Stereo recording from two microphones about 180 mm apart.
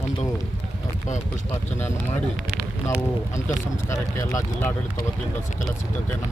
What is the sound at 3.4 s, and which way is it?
Speech, 15° left (ahead or behind).